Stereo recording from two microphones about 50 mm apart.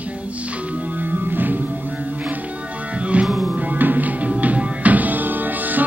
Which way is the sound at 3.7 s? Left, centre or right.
Right.